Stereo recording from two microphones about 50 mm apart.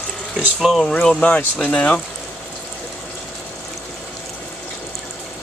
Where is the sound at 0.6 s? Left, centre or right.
Centre.